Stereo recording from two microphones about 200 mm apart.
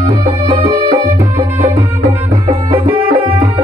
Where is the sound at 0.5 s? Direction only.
20° right (ahead or behind).